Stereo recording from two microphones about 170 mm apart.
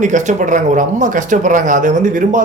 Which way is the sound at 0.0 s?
45° right (ahead or behind).